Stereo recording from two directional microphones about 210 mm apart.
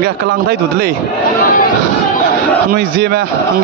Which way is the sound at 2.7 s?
50° right (ahead or behind).